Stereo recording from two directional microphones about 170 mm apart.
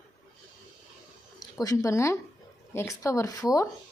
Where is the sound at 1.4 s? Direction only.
20° left (ahead or behind).